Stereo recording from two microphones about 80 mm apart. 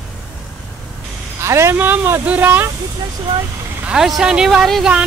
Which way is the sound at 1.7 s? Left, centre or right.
Right.